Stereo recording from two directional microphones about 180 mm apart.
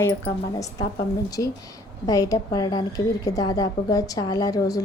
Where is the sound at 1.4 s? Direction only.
20° left (ahead or behind).